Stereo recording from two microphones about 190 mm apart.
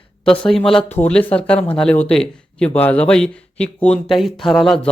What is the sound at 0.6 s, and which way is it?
Speech, 5° left (ahead or behind).